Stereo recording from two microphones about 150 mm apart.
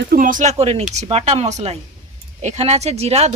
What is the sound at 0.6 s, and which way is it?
Speech, 45° right (ahead or behind).